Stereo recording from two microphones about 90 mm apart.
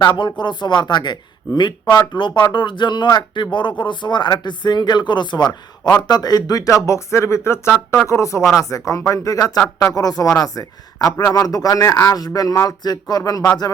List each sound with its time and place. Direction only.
0.0 s speech: 60° left (ahead or behind)